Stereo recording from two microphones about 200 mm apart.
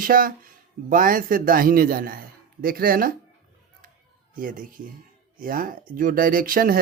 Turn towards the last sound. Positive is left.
turn(degrees=-45)  # may be behind; listen again after turning